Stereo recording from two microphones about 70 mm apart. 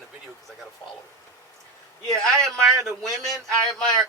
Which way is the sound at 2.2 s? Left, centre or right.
Centre.